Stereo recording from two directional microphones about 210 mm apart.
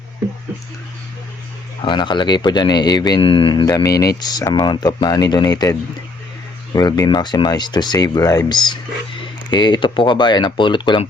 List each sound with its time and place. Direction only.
1.8 s speech: 20° left (ahead or behind)
6.7 s speech: 15° left (ahead or behind)